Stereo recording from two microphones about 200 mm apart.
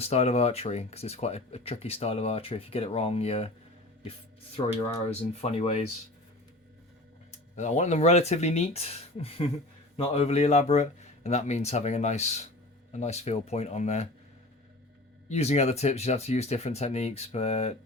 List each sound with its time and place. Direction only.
0.0 s speech: 30° left (ahead or behind)
5.3 s speech: 30° left (ahead or behind)
7.5 s speech: 35° left (ahead or behind)
15.3 s speech: 35° left (ahead or behind)